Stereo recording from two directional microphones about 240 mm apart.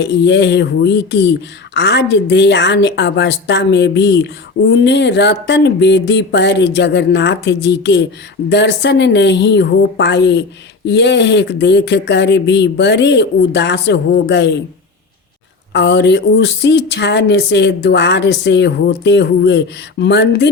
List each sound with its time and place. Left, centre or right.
0.0 s speech: left
15.7 s speech: left